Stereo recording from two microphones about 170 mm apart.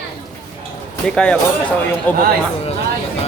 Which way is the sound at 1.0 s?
5° left (ahead or behind).